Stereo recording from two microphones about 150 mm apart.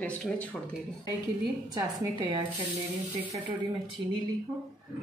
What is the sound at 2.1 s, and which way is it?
Speech, 35° right (ahead or behind).